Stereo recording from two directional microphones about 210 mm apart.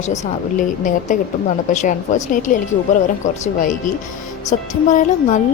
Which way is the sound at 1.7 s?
35° left (ahead or behind).